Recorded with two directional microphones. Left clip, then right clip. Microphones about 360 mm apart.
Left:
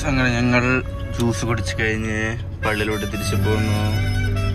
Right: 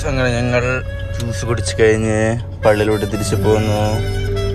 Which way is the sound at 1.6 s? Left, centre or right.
Centre.